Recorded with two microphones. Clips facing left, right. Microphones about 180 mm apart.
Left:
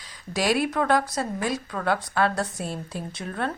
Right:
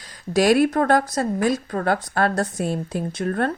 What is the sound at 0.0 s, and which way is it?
Speech, 45° right (ahead or behind).